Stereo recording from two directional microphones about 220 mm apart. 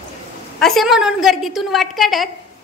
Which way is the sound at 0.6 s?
Centre (ahead or behind).